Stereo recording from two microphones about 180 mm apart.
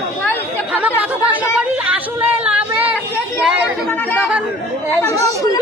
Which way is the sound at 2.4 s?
10° right (ahead or behind).